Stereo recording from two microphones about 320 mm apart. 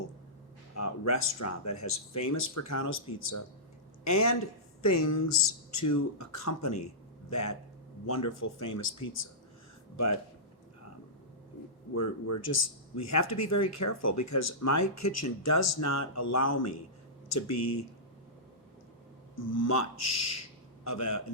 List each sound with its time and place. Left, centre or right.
0.8 s speech: left
2.9 s speech: left
4.0 s speech: left
5.3 s speech: left
8.0 s speech: left
11.9 s speech: left
19.4 s speech: left